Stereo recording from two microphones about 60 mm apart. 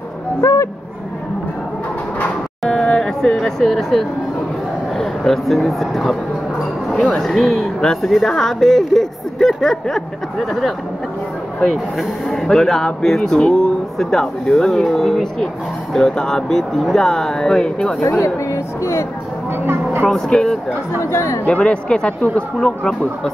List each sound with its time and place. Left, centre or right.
0.4 s owl: left
2.6 s a sound: centre
4.9 s speech: centre
7.2 s speech: centre
11.6 s speech: centre
18.2 s speech: left
19.6 s a sound: right
20.1 s speech: centre
21.0 s speech: left
21.5 s speech: centre